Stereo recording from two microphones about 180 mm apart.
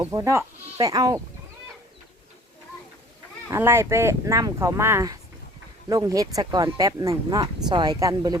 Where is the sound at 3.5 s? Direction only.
15° right (ahead or behind).